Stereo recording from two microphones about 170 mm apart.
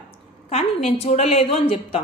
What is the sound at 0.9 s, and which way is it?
A woman's voice, 40° left (ahead or behind).